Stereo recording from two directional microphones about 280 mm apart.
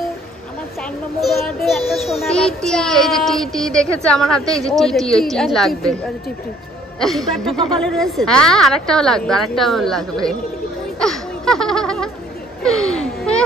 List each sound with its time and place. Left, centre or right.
1.2 s child singing: centre
11.0 s a sound: centre
12.6 s speech: centre